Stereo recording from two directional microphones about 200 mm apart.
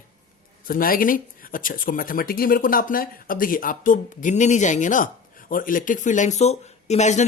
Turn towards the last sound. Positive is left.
turn(degrees=35)  # may be behind; listen again after turning